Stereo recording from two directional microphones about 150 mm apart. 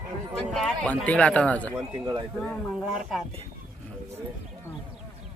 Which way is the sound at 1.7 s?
25° right (ahead or behind).